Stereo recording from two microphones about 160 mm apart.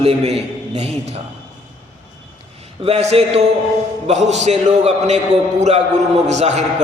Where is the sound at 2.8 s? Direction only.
40° right (ahead or behind).